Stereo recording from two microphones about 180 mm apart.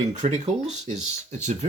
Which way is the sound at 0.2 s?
40° right (ahead or behind).